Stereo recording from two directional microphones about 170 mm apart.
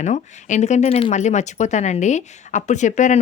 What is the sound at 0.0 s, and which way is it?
Speech, 45° left (ahead or behind).